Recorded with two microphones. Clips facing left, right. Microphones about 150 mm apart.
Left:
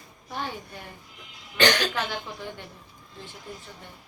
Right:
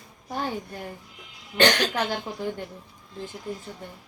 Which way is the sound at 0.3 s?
40° right (ahead or behind).